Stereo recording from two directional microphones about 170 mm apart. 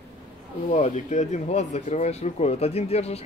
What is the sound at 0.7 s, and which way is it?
Speech, 45° left (ahead or behind).